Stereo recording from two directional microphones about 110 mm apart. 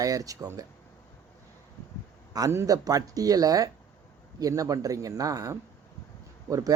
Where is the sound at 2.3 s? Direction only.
30° right (ahead or behind).